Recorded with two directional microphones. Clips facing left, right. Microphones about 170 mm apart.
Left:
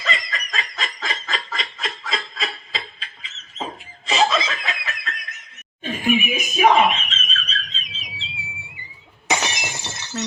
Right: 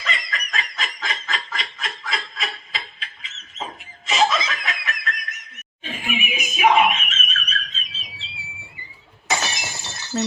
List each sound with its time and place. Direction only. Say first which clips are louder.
0.0 s snicker: left 2 dB; 30° left (ahead or behind)
6.2 s a sound: right 3 dB; 35° left (ahead or behind); by 8.3 s 20° left (ahead or behind)
9.2 s shatter: left 2 dB; 20° left (ahead or behind)